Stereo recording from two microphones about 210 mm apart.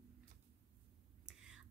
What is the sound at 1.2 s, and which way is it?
Whispering, 5° right (ahead or behind).